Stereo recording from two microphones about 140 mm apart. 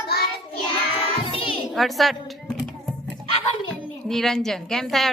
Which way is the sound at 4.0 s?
Centre (ahead or behind).